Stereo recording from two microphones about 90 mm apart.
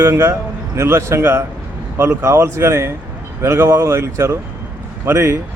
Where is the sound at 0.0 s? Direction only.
30° right (ahead or behind).